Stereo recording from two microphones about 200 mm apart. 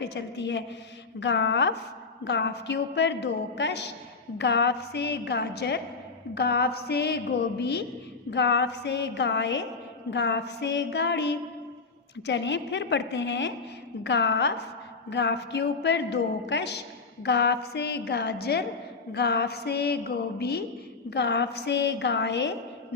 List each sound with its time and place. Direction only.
0.0 s a woman's voice: 60° left (ahead or behind)